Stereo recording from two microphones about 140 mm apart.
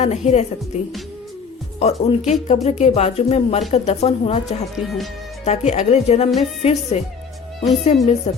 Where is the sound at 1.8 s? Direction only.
50° left (ahead or behind).